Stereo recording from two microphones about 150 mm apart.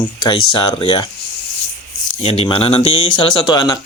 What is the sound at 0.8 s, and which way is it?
Speech, 35° left (ahead or behind).